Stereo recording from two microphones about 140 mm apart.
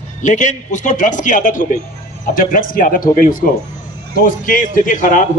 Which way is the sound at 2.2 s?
80° left.